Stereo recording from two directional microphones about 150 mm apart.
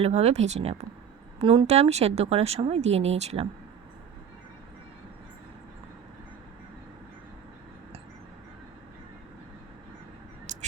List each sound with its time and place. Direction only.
0.0 s speech: 45° right (ahead or behind)